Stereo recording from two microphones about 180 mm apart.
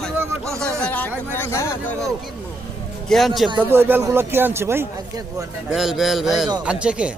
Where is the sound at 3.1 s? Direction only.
5° left (ahead or behind).